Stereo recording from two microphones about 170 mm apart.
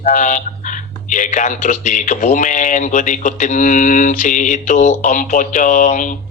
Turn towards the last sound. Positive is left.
turn(degrees=50)  # may be behind; listen again after turning